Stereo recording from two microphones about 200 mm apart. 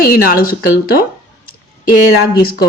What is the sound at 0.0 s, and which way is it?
A woman's voice, 45° left (ahead or behind).